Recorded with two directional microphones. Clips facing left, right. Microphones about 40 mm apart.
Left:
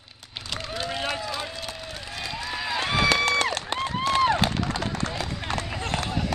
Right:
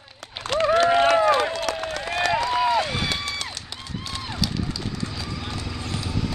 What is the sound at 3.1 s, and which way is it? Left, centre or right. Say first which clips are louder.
Run: left 7 dB; left.